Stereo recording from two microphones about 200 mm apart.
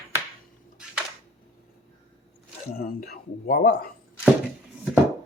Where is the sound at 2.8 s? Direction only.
45° left (ahead or behind).